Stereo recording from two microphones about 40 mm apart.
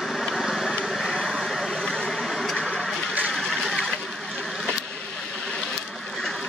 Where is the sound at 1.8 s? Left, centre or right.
Centre.